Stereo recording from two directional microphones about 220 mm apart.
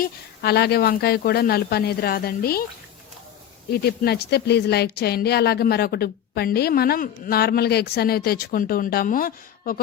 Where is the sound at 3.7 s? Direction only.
45° left (ahead or behind).